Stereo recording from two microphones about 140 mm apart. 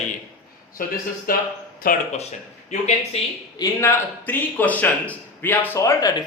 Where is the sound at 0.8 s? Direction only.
90° left.